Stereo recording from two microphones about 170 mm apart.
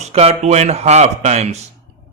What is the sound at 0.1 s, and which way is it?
A man's voice, 35° right (ahead or behind).